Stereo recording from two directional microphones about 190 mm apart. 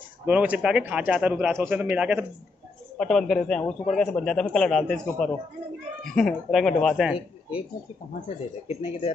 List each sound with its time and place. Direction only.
0.2 s a man's voice: 5° right (ahead or behind)
3.0 s a man's voice: 5° left (ahead or behind)
8.6 s speech: 30° left (ahead or behind)